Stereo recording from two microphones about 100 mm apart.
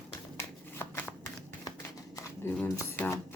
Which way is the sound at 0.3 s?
25° left (ahead or behind).